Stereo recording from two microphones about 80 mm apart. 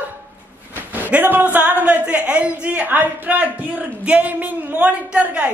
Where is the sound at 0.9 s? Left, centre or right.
Right.